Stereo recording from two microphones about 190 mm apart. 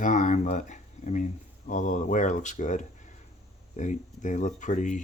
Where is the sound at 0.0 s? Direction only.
40° left (ahead or behind).